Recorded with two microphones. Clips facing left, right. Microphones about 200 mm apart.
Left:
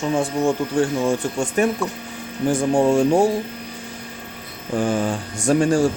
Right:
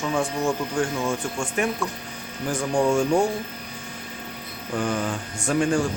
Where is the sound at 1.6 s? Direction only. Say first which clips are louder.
Left 5 dB; 35° left (ahead or behind).